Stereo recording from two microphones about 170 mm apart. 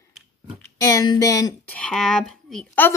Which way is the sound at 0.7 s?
20° left (ahead or behind).